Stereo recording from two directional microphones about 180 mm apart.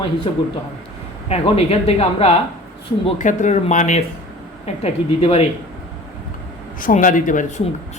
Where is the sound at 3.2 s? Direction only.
45° left (ahead or behind).